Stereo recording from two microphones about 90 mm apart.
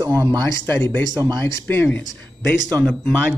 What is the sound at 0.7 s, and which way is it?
Speech, 20° left (ahead or behind).